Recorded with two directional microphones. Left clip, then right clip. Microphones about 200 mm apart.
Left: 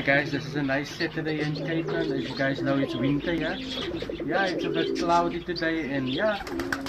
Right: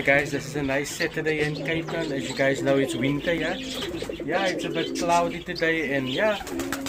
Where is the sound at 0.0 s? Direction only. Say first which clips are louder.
Right 2 dB; 30° right (ahead or behind).